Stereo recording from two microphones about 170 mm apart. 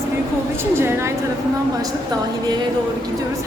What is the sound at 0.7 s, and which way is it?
Speech, 15° right (ahead or behind).